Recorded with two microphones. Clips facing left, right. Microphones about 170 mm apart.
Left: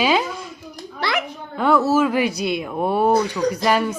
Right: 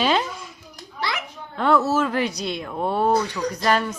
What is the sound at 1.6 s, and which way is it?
Speech, centre (ahead or behind).